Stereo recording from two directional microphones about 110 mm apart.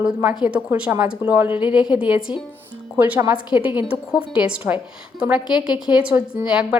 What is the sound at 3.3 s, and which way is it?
A woman's voice, 10° right (ahead or behind).